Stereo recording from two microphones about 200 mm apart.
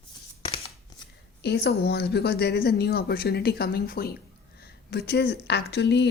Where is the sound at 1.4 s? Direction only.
55° left (ahead or behind).